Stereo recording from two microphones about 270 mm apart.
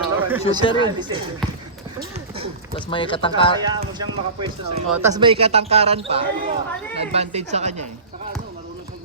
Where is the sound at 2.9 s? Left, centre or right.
Centre.